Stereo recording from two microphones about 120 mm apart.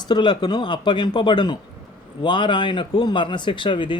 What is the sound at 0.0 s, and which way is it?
Speech, 40° left (ahead or behind).